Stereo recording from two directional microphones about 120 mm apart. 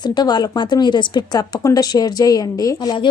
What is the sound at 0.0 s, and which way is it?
A woman's voice, 35° left (ahead or behind).